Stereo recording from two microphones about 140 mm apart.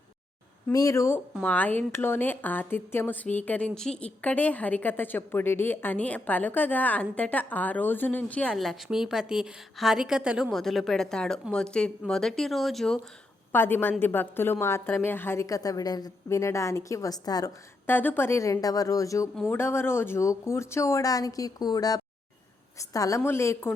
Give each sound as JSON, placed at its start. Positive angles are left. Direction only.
{"t": 0.7, "sound": "a woman's voice", "side_deg": 25}
{"t": 13.5, "sound": "a woman's voice", "side_deg": 15}
{"t": 17.8, "sound": "a woman's voice", "side_deg": 15}